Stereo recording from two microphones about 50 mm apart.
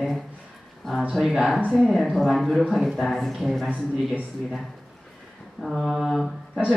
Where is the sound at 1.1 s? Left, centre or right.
Centre.